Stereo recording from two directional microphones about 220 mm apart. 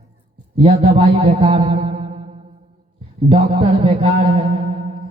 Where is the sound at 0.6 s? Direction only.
25° right (ahead or behind).